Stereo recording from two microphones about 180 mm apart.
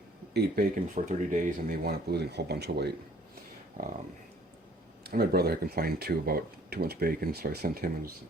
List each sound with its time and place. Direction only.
0.3 s speech: 60° right (ahead or behind)
5.0 s speech: 60° right (ahead or behind)